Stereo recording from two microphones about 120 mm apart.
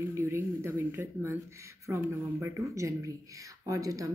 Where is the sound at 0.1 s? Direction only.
25° right (ahead or behind).